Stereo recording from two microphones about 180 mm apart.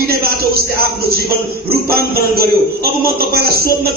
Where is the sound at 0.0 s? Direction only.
60° right (ahead or behind).